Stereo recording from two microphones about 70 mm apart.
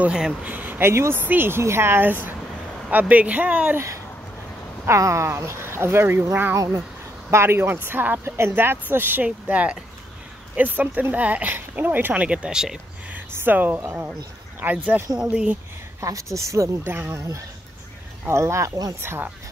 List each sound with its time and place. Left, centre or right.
0.0 s speech: centre
0.4 s speech: right
3.7 s speech: right
6.5 s speech: right; by 12.7 s centre
13.3 s speech: right
15.1 s speech: centre
16.0 s speech: right
16.8 s speech: right
18.9 s speech: right